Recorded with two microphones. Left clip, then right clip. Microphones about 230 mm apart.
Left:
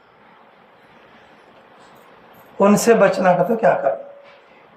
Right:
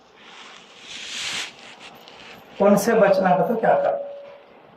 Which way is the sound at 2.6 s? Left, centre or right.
Left.